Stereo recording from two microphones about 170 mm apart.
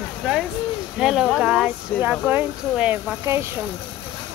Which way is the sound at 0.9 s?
5° right (ahead or behind).